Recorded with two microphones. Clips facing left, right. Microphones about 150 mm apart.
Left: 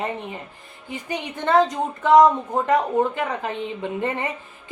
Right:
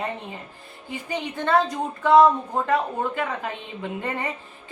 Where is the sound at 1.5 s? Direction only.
20° left (ahead or behind).